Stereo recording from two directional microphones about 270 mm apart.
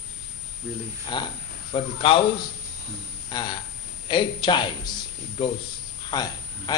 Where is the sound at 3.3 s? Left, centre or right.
Centre.